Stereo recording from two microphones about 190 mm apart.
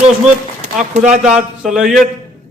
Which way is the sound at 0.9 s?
40° right (ahead or behind).